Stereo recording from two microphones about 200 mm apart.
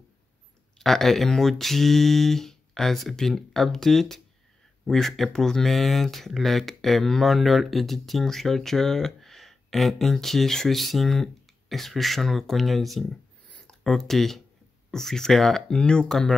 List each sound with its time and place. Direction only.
0.7 s speech: centre (ahead or behind)